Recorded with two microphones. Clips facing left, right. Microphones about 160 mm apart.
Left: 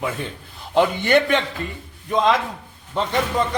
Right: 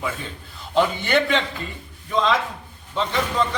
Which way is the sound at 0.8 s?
55° left (ahead or behind).